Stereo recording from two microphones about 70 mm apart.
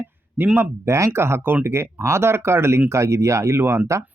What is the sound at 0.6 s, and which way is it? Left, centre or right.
Speech, right.